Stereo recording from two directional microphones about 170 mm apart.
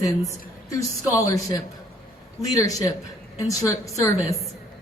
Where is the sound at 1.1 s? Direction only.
20° left (ahead or behind).